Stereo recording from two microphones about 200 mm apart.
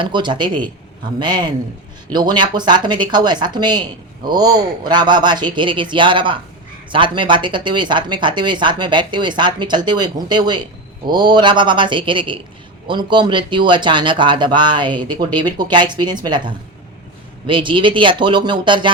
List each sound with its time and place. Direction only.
0.0 s speech: 25° right (ahead or behind)